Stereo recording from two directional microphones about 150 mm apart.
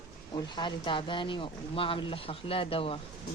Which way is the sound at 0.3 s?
30° left (ahead or behind).